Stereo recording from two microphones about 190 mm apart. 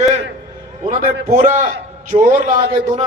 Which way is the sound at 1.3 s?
40° right (ahead or behind).